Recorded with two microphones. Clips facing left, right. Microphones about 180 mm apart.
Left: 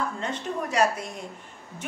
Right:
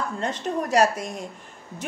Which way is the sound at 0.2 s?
40° right (ahead or behind).